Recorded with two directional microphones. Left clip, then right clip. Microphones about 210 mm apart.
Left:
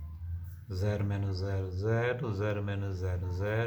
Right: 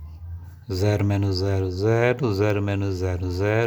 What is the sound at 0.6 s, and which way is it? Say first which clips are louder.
Speech: right 12 dB; 50° right (ahead or behind).